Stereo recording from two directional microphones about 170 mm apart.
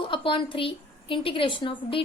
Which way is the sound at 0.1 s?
30° left (ahead or behind).